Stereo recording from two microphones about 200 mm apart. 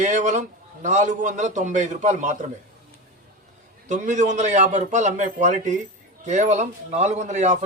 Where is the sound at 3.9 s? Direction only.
40° right (ahead or behind).